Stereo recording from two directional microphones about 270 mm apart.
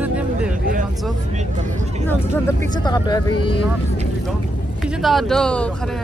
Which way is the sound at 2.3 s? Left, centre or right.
Centre.